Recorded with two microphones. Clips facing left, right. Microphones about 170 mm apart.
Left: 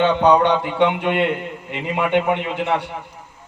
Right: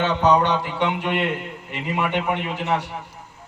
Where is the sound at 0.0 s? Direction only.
60° left (ahead or behind).